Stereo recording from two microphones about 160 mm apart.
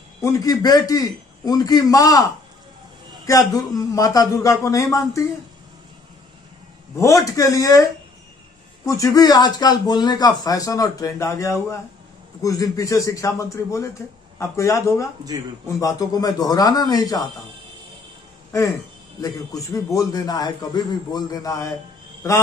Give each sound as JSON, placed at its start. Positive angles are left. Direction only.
{"t": 0.2, "sound": "speech", "side_deg": 20}
{"t": 3.3, "sound": "speech", "side_deg": 20}
{"t": 7.0, "sound": "speech", "side_deg": 20}
{"t": 8.8, "sound": "speech", "side_deg": 20}
{"t": 19.2, "sound": "speech", "side_deg": 20}